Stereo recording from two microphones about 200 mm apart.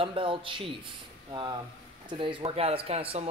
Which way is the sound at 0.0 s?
25° right (ahead or behind).